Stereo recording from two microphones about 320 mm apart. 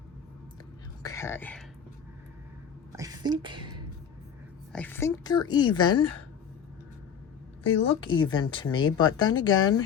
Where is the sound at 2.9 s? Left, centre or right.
Centre.